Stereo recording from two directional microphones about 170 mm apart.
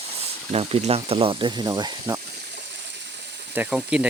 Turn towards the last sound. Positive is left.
turn(degrees=-5)  # may be behind; listen again after turning